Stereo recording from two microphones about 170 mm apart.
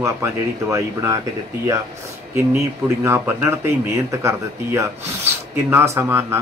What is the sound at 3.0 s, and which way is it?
Speech, 15° right (ahead or behind).